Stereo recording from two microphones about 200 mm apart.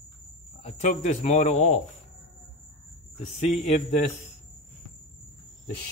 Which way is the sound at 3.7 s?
40° left (ahead or behind).